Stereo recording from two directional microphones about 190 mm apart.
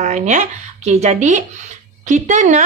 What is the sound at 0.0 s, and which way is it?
A woman's voice, 40° right (ahead or behind).